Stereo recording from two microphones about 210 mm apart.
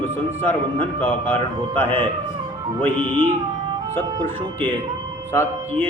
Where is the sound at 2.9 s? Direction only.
25° right (ahead or behind).